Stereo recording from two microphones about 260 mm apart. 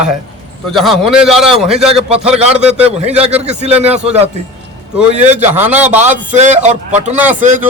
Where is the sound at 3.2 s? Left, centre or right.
Right.